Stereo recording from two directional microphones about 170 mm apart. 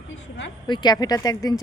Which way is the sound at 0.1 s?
90° left.